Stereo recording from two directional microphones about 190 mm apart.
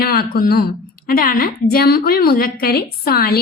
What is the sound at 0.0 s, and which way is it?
A woman's voice, 55° left (ahead or behind).